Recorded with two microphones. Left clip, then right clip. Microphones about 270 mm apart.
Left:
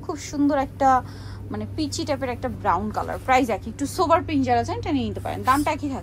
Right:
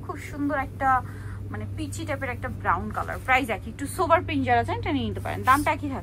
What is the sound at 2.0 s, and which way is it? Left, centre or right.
A woman's voice, centre.